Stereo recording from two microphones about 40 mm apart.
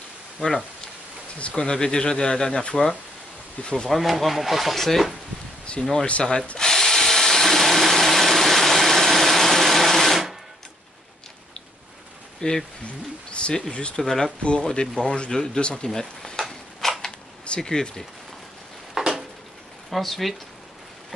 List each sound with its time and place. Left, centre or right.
1.5 s speech: centre
3.9 s speech: centre
5.7 s speech: centre
6.6 s drill: centre
12.4 s speech: centre
13.3 s a sound: left
13.6 s speech: left
14.0 s speech: centre
14.4 s speech: left
18.9 s a sound: centre
19.9 s speech: centre